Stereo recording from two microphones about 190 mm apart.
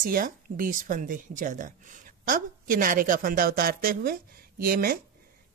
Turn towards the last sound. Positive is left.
turn(degrees=-50)  # may be behind; listen again after turning